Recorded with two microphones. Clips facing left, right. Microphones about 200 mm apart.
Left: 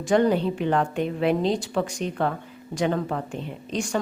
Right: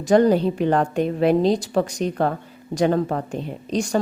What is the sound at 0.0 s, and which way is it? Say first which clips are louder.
A woman's voice: right 4 dB; 40° right (ahead or behind).